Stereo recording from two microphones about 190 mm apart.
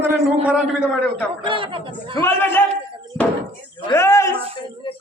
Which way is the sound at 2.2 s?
10° left (ahead or behind).